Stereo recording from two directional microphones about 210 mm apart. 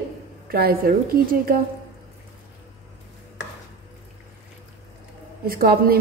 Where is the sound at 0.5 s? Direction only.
45° right (ahead or behind).